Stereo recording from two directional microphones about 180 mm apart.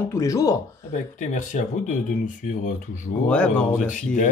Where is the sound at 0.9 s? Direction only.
45° left (ahead or behind).